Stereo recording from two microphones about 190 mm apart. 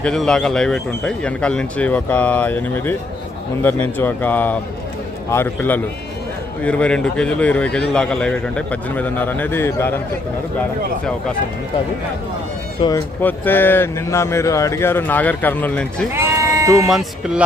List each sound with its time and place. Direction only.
0.0 s speech: 5° left (ahead or behind)
13.2 s speech: 10° left (ahead or behind)
16.1 s bleat: 15° right (ahead or behind)
16.9 s speech: centre (ahead or behind)